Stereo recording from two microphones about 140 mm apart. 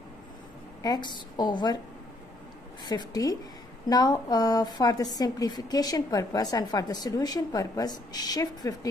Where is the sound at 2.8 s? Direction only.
30° left (ahead or behind).